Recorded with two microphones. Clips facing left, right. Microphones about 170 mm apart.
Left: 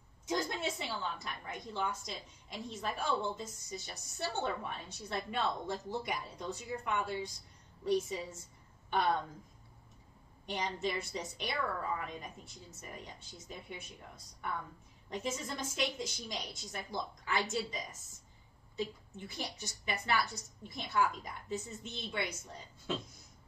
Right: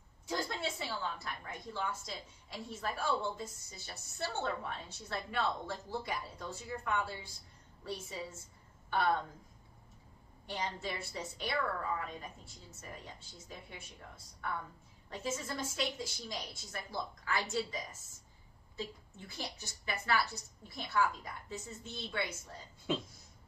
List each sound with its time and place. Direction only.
0.3 s a woman's voice: 20° left (ahead or behind)
10.4 s a woman's voice: 20° left (ahead or behind)